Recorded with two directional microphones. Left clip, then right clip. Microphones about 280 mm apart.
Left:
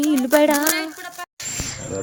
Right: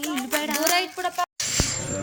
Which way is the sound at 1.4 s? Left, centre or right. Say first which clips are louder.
Right 4 dB; centre.